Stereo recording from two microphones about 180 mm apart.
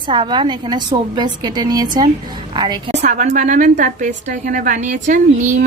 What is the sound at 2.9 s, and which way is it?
A woman's voice, 40° right (ahead or behind).